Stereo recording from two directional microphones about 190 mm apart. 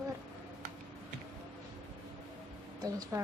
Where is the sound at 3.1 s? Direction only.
15° right (ahead or behind).